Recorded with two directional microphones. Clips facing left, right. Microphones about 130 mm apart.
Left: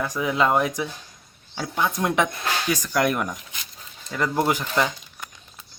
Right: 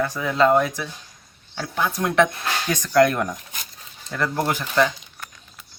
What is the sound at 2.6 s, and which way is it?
Speech, 10° left (ahead or behind).